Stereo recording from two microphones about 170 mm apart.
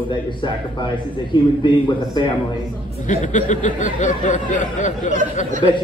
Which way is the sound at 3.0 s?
45° left (ahead or behind).